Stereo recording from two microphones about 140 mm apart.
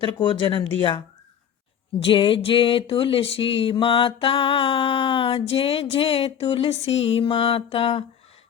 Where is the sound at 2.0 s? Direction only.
40° left (ahead or behind).